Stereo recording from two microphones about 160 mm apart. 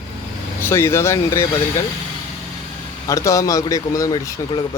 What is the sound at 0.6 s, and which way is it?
Speech, 15° left (ahead or behind).